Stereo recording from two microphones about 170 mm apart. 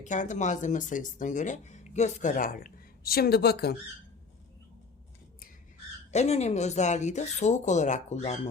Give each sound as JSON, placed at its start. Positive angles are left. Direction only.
{"t": 0.0, "sound": "speech", "side_deg": 45}
{"t": 6.1, "sound": "speech", "side_deg": 40}